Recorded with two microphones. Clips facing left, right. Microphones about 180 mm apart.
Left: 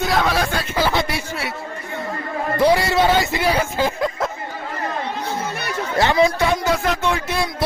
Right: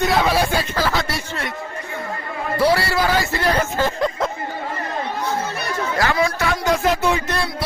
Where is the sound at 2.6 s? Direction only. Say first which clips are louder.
Left 2 dB; 15° left (ahead or behind).